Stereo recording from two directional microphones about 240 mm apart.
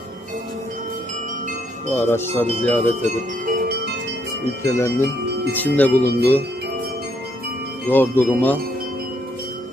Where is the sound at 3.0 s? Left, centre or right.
Right.